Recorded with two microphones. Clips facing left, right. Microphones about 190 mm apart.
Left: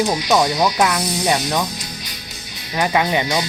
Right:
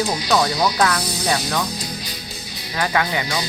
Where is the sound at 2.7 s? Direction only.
20° left (ahead or behind).